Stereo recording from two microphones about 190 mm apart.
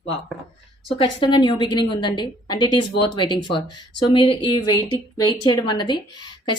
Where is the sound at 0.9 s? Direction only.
25° left (ahead or behind).